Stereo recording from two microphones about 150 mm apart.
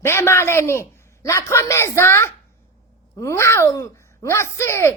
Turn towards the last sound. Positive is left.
turn(degrees=15)  # may be behind; listen again after turning